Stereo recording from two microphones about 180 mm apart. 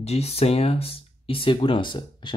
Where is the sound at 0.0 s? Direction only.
35° left (ahead or behind).